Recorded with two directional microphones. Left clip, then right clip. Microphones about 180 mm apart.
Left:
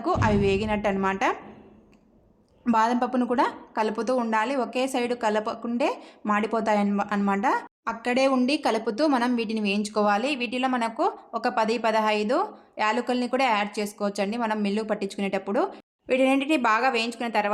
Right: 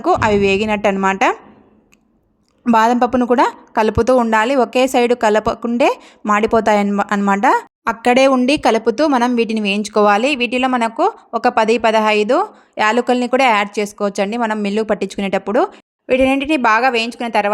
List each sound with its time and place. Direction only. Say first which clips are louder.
0.0 s a woman's voice: right 10 dB; 45° right (ahead or behind)
2.6 s a woman's voice: right 10 dB; 45° right (ahead or behind)